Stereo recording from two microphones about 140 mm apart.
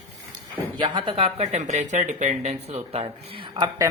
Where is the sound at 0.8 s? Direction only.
35° right (ahead or behind).